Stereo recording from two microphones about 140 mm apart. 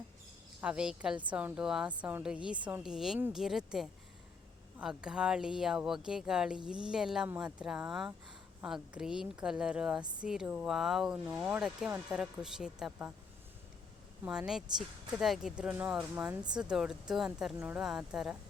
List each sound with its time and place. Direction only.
0.6 s a woman's voice: 10° right (ahead or behind)
14.3 s a woman's voice: 5° right (ahead or behind)